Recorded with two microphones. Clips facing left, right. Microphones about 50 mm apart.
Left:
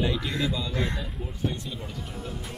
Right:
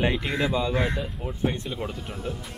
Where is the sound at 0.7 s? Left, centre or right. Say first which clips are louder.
Right 4 dB; centre.